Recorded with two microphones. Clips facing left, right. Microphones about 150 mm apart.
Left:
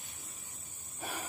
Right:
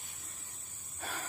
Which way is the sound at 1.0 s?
10° left (ahead or behind).